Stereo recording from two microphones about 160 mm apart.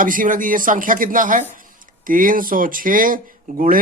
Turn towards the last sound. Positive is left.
turn(degrees=-60)  # may be behind; listen again after turning